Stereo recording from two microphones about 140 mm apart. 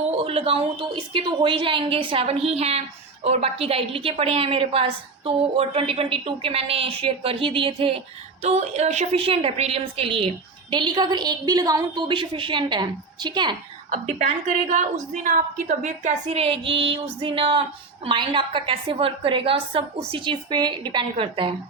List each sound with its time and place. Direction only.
0.0 s a woman's voice: 45° right (ahead or behind)
14.7 s a woman's voice: 60° right (ahead or behind); by 21.5 s 40° right (ahead or behind)